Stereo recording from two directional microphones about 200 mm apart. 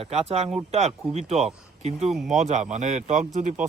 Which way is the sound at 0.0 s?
30° right (ahead or behind).